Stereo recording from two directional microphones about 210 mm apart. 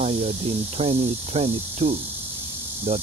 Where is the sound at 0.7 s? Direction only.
30° right (ahead or behind).